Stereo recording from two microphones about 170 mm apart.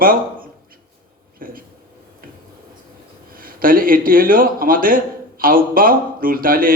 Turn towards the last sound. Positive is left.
turn(degrees=-55)  # may be behind; listen again after turning